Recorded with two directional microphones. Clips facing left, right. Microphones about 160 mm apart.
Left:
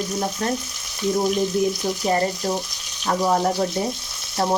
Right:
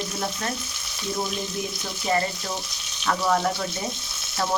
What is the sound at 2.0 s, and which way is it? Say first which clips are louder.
Frying: left 3 dB; 40° left (ahead or behind).